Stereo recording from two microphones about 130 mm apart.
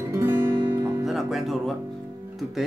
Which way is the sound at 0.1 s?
20° right (ahead or behind).